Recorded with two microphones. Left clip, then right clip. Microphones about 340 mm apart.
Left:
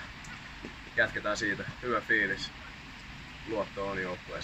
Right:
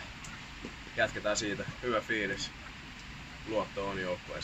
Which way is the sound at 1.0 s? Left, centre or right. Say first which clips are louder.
Left 2 dB; centre.